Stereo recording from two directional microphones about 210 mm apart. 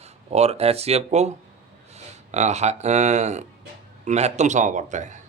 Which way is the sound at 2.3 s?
35° right (ahead or behind).